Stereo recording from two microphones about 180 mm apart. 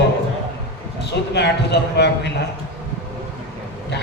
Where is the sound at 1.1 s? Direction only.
70° left (ahead or behind).